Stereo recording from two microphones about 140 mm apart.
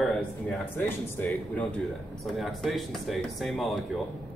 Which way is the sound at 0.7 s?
15° left (ahead or behind).